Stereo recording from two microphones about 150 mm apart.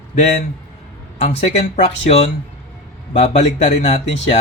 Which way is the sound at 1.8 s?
45° left (ahead or behind).